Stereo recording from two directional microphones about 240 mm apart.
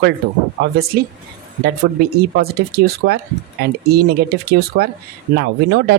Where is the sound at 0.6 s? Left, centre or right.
Right.